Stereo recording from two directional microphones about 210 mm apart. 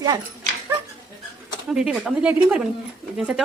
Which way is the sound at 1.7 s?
5° right (ahead or behind).